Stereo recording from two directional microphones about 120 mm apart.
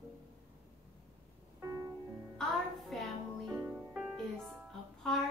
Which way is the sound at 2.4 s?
Centre (ahead or behind).